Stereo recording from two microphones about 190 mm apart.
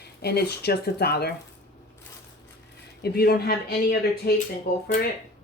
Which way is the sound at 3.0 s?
55° left (ahead or behind).